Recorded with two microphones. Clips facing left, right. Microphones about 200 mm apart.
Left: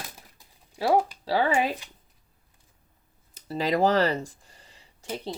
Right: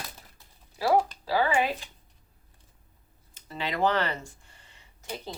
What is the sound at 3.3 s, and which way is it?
Speech, 40° left (ahead or behind).